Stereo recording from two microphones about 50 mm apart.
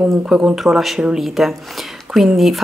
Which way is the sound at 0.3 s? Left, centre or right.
Centre.